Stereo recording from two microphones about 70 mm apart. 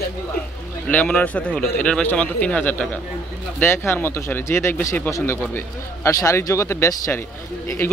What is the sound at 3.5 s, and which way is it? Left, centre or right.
Speech, left.